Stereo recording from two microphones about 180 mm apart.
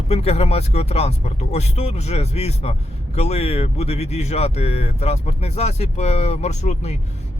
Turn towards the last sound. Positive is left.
turn(degrees=40)  # may be behind; listen again after turning